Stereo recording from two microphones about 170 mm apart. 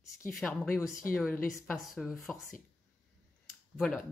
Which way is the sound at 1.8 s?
Centre (ahead or behind).